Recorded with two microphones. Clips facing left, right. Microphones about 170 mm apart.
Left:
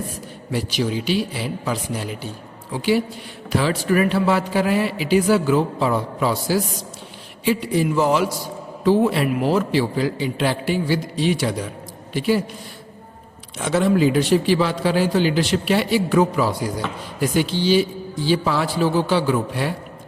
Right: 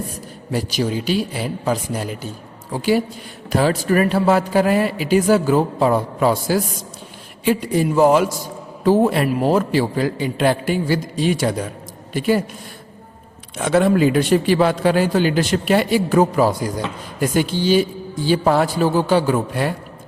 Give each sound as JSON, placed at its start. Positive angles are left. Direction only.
{"t": 0.5, "sound": "a man's voice", "side_deg": -40}
{"t": 13.6, "sound": "a man's voice", "side_deg": -55}